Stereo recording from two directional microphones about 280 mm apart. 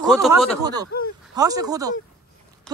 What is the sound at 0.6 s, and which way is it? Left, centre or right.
Speech, centre.